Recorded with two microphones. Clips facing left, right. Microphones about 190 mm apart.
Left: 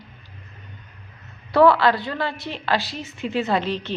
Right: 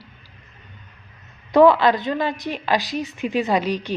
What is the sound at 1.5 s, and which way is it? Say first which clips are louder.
A woman's voice: right 2 dB; 15° right (ahead or behind).